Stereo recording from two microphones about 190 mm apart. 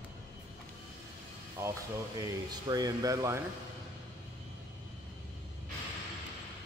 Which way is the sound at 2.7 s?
20° right (ahead or behind).